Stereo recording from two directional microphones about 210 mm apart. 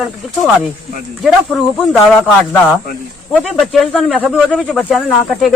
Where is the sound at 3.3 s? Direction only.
Centre (ahead or behind).